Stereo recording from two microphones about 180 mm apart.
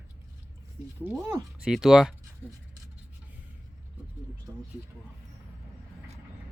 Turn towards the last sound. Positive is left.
turn(degrees=-10)  # may be behind; listen again after turning